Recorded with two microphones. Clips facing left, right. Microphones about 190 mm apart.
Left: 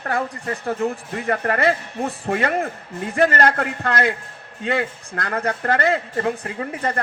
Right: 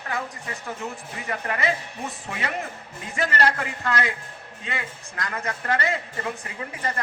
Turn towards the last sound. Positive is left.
turn(degrees=60)  # may be behind; listen again after turning